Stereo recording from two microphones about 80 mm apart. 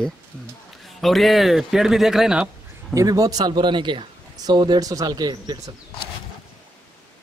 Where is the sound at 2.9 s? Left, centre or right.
Right.